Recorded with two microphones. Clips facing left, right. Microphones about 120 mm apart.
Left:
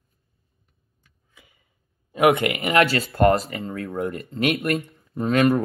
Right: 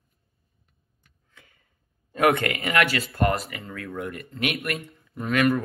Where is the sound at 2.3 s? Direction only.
20° left (ahead or behind).